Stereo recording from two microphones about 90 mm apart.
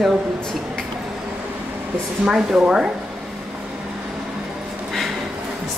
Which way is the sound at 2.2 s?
5° right (ahead or behind).